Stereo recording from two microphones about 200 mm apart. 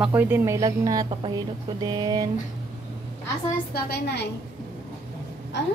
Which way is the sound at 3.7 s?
55° left (ahead or behind).